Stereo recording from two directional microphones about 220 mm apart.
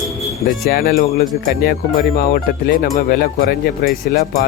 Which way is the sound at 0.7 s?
45° left (ahead or behind).